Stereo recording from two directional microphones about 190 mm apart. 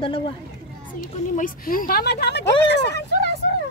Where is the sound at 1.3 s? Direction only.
45° left (ahead or behind); by 3.3 s 65° left (ahead or behind).